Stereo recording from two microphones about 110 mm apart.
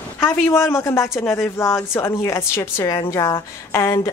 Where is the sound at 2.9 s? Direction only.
35° left (ahead or behind).